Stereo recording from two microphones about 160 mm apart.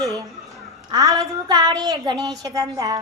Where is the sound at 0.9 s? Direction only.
20° right (ahead or behind).